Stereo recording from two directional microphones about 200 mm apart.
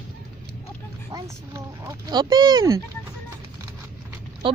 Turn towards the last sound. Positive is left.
turn(degrees=-25)  # may be behind; listen again after turning